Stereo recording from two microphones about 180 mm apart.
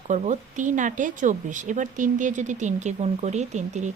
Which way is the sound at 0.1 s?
40° right (ahead or behind).